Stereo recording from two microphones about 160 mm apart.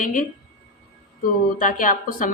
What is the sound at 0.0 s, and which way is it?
Speech, 55° left (ahead or behind).